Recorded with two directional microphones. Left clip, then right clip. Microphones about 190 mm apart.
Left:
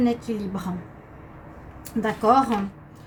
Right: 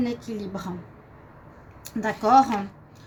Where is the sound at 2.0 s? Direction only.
55° right (ahead or behind).